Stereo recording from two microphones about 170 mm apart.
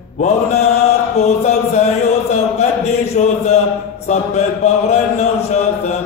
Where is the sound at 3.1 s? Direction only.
40° left (ahead or behind).